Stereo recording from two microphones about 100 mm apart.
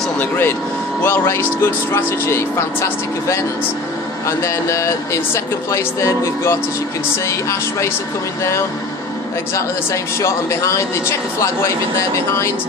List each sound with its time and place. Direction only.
0.2 s speech: 20° left (ahead or behind)
9.6 s speech: 30° left (ahead or behind)